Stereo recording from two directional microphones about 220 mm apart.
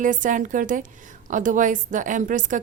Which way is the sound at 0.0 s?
35° right (ahead or behind).